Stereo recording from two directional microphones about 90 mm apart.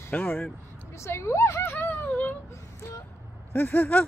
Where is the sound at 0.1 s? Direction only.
25° left (ahead or behind).